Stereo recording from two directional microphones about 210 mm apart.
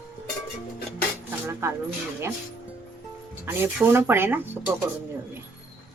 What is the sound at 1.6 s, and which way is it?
Speech, 10° right (ahead or behind).